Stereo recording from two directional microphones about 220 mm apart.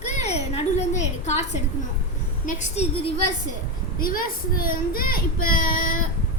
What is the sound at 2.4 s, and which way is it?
Speech, 25° left (ahead or behind).